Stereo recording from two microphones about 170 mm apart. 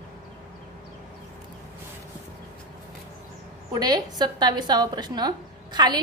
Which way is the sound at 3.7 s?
25° right (ahead or behind).